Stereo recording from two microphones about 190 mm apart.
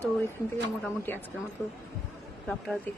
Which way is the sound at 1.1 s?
10° left (ahead or behind).